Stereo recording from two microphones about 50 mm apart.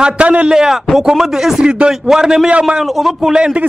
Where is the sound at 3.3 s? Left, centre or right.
Centre.